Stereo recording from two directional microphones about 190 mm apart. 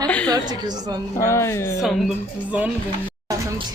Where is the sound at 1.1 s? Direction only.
15° left (ahead or behind).